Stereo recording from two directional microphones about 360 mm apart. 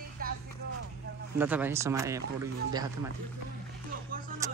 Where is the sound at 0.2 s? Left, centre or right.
Right.